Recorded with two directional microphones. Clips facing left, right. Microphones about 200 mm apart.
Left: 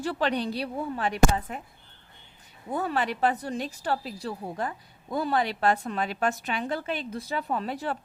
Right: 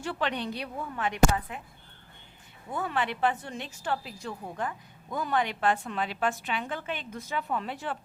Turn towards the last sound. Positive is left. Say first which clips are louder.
# left 3 dB
turn(degrees=40)  # may be behind; listen again after turning